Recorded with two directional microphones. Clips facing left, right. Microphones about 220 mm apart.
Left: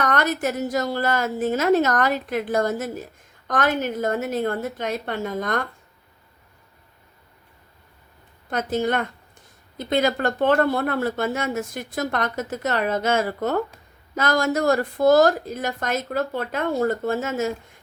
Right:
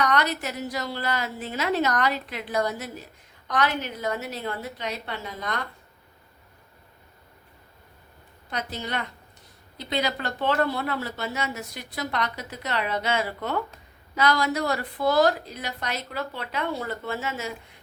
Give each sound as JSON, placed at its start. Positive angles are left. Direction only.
{"t": 0.0, "sound": "a woman's voice", "side_deg": 50}
{"t": 8.4, "sound": "a woman's voice", "side_deg": 50}